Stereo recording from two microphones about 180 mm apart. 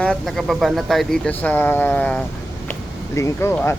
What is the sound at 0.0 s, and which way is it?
Speech, 5° left (ahead or behind).